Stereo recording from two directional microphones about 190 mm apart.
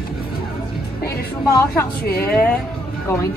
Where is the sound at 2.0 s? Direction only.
55° left (ahead or behind).